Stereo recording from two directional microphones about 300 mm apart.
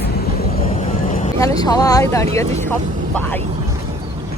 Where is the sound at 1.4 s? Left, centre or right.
Centre.